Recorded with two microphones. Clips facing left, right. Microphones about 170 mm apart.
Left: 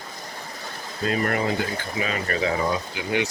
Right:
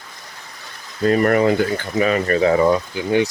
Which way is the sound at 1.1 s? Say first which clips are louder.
Right 9 dB; 55° right (ahead or behind).